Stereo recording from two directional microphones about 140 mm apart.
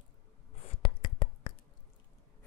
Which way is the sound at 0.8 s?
35° left (ahead or behind).